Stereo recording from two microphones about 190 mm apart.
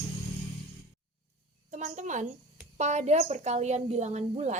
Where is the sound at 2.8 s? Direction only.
35° right (ahead or behind).